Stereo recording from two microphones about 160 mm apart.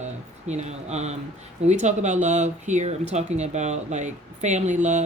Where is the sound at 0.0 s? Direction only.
45° right (ahead or behind).